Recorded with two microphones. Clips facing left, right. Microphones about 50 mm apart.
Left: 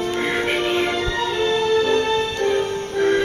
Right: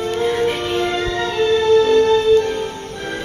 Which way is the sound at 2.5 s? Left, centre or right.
Left.